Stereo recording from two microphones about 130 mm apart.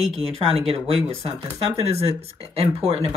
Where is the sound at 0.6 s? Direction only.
45° right (ahead or behind).